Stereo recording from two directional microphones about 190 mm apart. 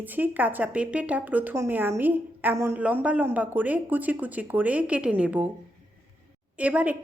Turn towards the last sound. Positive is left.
turn(degrees=-10)  # may be behind; listen again after turning